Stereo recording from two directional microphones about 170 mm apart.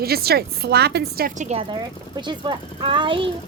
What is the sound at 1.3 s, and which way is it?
Speech, 45° right (ahead or behind).